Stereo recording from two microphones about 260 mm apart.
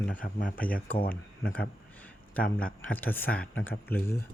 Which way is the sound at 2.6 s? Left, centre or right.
Centre.